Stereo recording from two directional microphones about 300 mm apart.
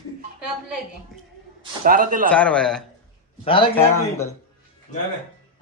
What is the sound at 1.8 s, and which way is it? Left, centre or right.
Speech, right.